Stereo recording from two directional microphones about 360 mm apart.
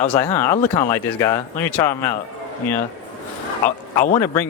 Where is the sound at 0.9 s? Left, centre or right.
Centre.